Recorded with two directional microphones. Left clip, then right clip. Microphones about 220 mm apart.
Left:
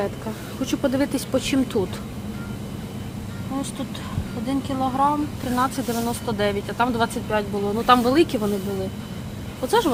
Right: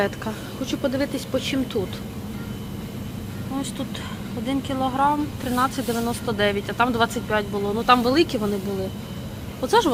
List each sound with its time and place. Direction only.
0.6 s speech: 20° left (ahead or behind)
4.4 s speech: 10° left (ahead or behind)
9.6 s speech: 10° left (ahead or behind)